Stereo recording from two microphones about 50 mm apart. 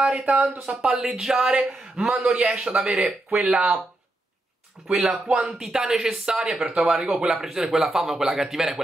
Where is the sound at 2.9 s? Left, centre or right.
Centre.